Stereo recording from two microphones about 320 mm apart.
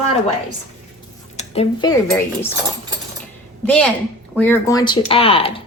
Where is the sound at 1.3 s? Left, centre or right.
Centre.